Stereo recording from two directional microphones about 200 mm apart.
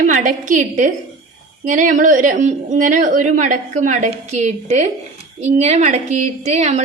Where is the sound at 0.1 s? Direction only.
40° right (ahead or behind).